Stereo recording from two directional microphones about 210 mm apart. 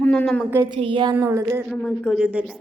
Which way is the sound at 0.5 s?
15° right (ahead or behind).